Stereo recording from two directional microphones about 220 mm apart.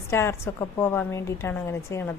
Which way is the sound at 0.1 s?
10° left (ahead or behind).